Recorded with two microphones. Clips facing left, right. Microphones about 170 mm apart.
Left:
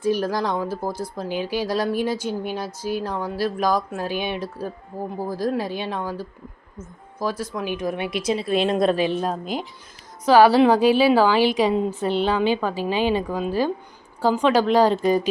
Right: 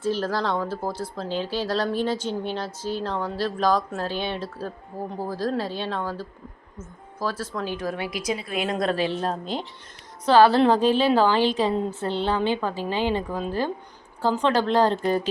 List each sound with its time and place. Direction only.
0.0 s speech: 15° left (ahead or behind)